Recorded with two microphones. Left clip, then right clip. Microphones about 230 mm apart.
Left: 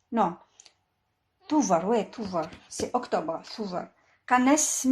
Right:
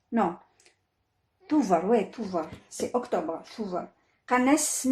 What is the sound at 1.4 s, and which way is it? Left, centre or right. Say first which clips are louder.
Speech: even; left.